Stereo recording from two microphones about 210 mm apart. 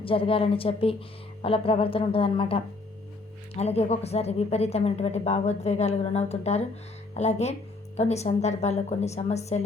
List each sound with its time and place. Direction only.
0.0 s a woman's voice: 25° left (ahead or behind)